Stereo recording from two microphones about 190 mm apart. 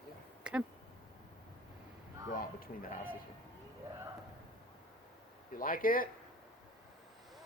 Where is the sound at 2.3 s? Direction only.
50° left (ahead or behind).